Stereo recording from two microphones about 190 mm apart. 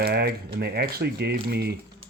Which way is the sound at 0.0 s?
55° right (ahead or behind).